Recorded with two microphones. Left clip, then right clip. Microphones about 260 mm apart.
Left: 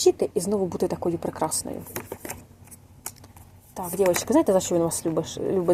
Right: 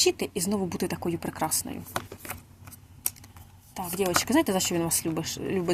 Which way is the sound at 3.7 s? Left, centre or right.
Right.